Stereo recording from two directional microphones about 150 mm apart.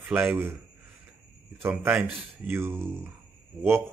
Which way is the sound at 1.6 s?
15° right (ahead or behind).